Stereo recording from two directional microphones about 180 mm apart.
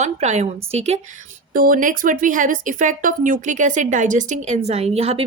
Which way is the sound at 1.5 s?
50° right (ahead or behind).